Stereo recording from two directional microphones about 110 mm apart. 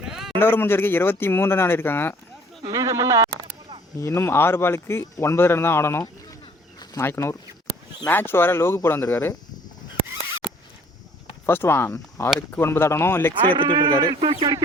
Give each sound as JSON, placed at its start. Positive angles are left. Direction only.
{"t": 0.0, "sound": "a sound", "side_deg": -5}
{"t": 0.3, "sound": "speech", "side_deg": 20}
{"t": 2.7, "sound": "speech", "side_deg": -30}
{"t": 4.0, "sound": "speech", "side_deg": 25}
{"t": 11.4, "sound": "speech", "side_deg": 20}
{"t": 13.4, "sound": "a man's voice", "side_deg": -50}